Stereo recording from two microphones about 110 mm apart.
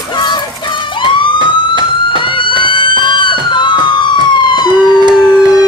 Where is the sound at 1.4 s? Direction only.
45° right (ahead or behind).